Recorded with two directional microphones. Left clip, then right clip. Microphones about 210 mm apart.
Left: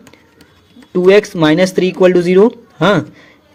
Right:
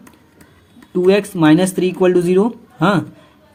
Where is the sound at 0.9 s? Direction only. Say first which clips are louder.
Left 5 dB; 20° left (ahead or behind).